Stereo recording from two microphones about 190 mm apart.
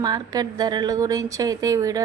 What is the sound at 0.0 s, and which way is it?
A woman's voice, 20° right (ahead or behind).